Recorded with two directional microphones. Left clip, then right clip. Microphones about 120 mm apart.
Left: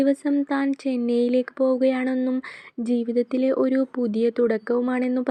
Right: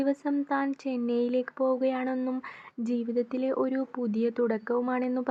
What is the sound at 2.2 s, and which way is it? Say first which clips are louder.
Speech: left 7 dB; 20° left (ahead or behind).